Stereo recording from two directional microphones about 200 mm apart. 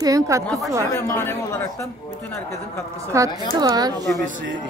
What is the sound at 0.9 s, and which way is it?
Speech, 10° left (ahead or behind).